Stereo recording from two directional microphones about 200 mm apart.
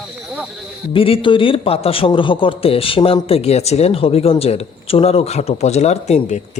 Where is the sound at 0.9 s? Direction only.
25° left (ahead or behind).